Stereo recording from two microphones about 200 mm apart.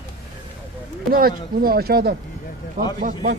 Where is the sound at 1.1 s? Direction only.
50° right (ahead or behind).